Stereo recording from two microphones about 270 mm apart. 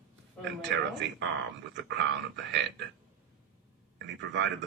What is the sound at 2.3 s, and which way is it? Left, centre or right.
Speech, right.